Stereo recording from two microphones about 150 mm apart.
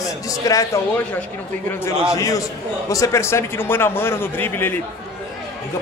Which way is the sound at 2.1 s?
25° left (ahead or behind).